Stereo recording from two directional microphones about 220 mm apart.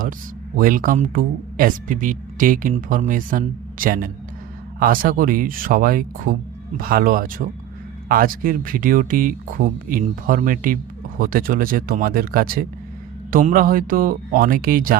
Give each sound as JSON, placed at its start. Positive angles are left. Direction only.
{"t": 0.5, "sound": "speech", "side_deg": -40}